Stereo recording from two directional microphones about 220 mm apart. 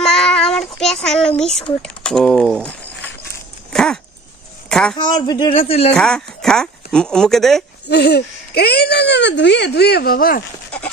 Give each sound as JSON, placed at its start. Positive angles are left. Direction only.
{"t": 0.0, "sound": "a child's voice", "side_deg": 5}
{"t": 3.7, "sound": "dog", "side_deg": 0}
{"t": 4.6, "sound": "a sound", "side_deg": 5}
{"t": 4.9, "sound": "speech", "side_deg": 20}
{"t": 5.9, "sound": "speech", "side_deg": 5}
{"t": 7.9, "sound": "speech", "side_deg": 50}